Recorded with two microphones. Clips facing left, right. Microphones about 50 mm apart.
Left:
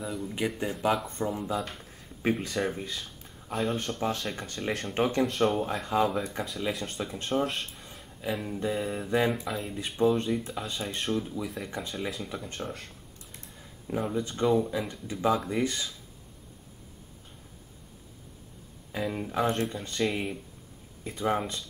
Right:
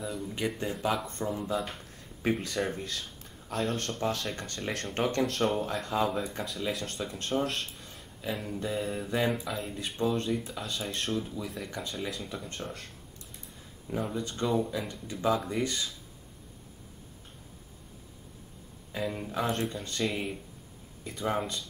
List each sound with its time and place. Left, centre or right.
0.0 s speech: centre
1.6 s speech: centre
1.9 s speech: centre
4.0 s speech: centre
7.4 s speech: centre
11.6 s speech: centre
13.8 s speech: centre
14.7 s speech: centre
15.1 s speech: centre
15.6 s speech: left
18.9 s speech: centre
21.0 s speech: left